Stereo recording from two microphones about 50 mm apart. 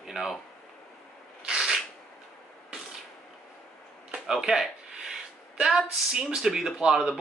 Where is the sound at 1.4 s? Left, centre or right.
Centre.